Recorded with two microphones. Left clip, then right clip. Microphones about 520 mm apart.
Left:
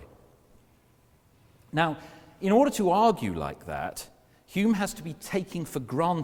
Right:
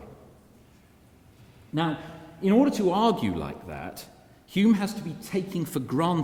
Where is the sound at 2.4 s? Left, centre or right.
Left.